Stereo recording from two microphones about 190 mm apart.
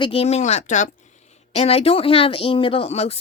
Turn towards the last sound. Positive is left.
turn(degrees=35)  # may be behind; listen again after turning